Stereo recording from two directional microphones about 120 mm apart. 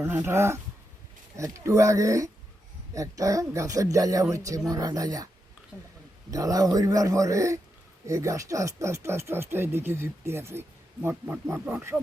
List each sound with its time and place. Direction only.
0.0 s speech: 20° right (ahead or behind)
5.7 s speech: 10° right (ahead or behind)
6.3 s speech: 30° right (ahead or behind)